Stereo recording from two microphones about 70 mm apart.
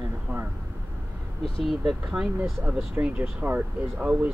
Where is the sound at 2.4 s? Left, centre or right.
Centre.